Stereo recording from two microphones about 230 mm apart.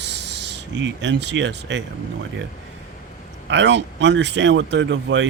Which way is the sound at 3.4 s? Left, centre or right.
Right.